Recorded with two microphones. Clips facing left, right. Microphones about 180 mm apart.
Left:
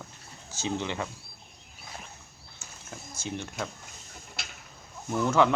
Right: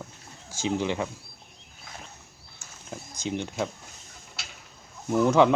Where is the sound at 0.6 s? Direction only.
15° right (ahead or behind).